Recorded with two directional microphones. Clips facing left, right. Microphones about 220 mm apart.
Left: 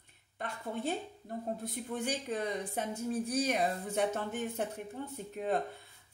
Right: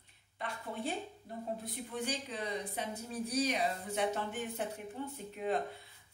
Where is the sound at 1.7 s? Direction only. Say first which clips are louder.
Left 4 dB; 50° left (ahead or behind).